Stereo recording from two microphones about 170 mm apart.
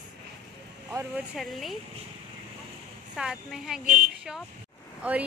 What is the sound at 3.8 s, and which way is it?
Speech, 55° right (ahead or behind).